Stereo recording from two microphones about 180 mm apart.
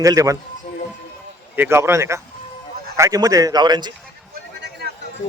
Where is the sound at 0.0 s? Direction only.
20° right (ahead or behind).